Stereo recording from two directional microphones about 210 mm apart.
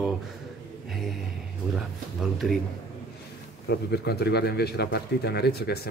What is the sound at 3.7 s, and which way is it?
Speech, 50° left (ahead or behind).